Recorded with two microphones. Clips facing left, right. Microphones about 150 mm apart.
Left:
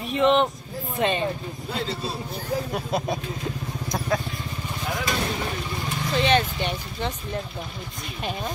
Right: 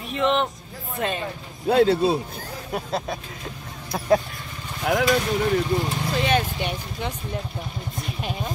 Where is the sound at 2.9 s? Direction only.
10° left (ahead or behind).